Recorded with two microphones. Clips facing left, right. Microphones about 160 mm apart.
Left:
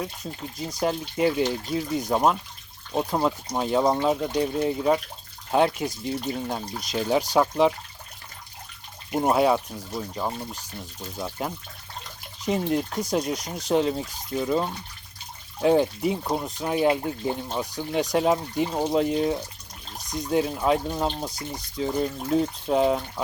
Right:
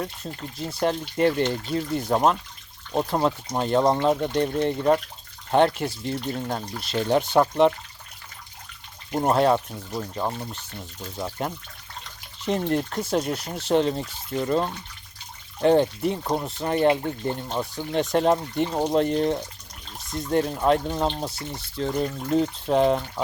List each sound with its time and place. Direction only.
0.0 s speech: 5° left (ahead or behind)
9.1 s speech: 5° left (ahead or behind)
18.1 s speech: 5° left (ahead or behind)